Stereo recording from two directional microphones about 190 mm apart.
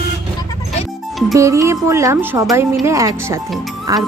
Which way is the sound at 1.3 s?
15° right (ahead or behind).